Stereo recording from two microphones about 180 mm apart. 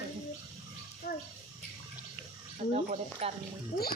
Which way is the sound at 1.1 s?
60° left (ahead or behind).